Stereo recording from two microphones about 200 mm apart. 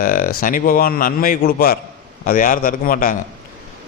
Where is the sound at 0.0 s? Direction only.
45° left (ahead or behind).